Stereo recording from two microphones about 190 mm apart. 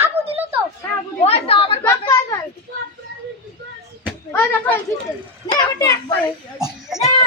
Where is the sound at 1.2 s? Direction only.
30° left (ahead or behind).